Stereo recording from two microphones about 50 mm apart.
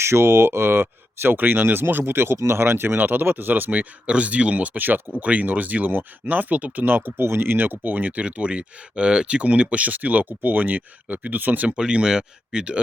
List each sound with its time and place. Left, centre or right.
0.0 s speech: right
6.8 s speech: right
11.8 s speech: centre